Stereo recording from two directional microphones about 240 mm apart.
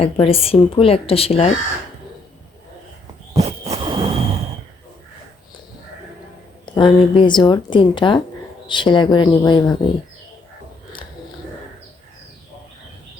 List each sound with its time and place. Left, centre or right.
0.0 s a woman's voice: left
3.4 s a sound: right
6.7 s a woman's voice: left